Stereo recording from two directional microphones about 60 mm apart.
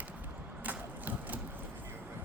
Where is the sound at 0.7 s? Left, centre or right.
Right.